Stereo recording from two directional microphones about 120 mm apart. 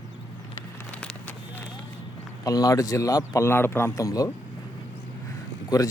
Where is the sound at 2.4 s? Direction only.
30° left (ahead or behind).